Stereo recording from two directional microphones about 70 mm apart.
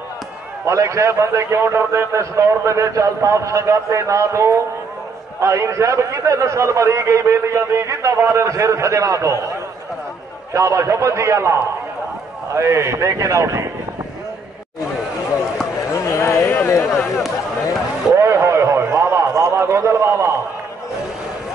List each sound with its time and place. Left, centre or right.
0.7 s a man's voice: right
10.5 s a man's voice: right
15.9 s chop: left
16.5 s speech: left
18.1 s a sound: right